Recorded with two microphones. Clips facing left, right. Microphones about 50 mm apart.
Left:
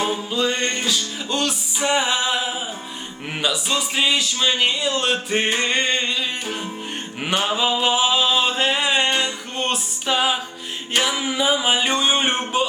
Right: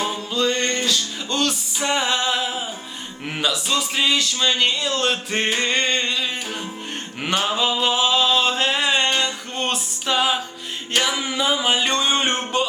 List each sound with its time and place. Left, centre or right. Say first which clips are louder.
0.0 s music: left 1 dB; centre
3.3 s speech: even; centre
7.2 s a sound: even; centre
10.9 s speech: left 1 dB; centre